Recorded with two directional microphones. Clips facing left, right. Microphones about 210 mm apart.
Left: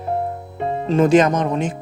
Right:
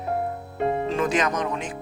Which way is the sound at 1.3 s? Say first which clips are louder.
Left 7 dB; 25° left (ahead or behind).